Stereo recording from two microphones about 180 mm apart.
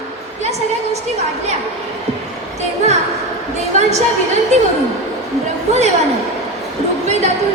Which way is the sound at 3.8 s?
40° right (ahead or behind).